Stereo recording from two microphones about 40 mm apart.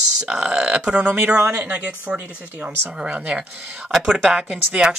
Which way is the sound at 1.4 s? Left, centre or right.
Right.